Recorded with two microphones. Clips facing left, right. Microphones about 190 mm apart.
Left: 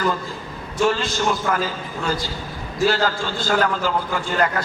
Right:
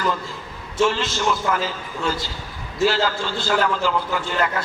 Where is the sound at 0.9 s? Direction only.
45° left (ahead or behind).